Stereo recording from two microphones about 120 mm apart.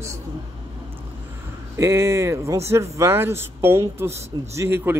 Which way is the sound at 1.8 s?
25° right (ahead or behind).